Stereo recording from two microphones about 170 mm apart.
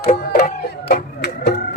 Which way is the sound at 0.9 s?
75° left (ahead or behind).